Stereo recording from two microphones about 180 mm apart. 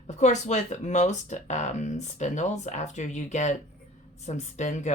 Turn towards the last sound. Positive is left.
turn(degrees=40)  # may be behind; listen again after turning